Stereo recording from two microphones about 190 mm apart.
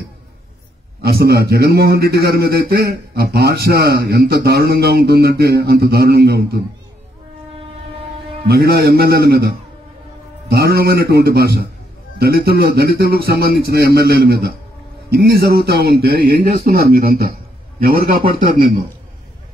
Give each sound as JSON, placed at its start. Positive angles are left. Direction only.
{"t": 1.0, "sound": "a man's voice", "side_deg": -55}
{"t": 8.5, "sound": "a man's voice", "side_deg": -55}